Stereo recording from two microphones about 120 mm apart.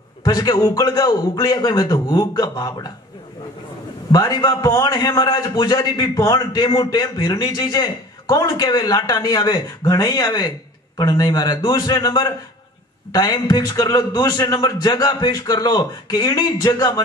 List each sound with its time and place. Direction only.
0.2 s a man's voice: 30° left (ahead or behind)
4.1 s a man's voice: 35° left (ahead or behind)